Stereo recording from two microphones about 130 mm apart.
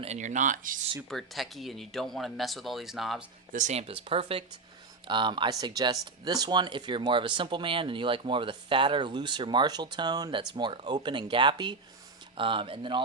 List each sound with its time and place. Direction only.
0.0 s speech: 60° right (ahead or behind); by 0.9 s 90° right
1.1 s speech: centre (ahead or behind)
3.5 s speech: 65° right (ahead or behind); by 13.0 s 40° right (ahead or behind)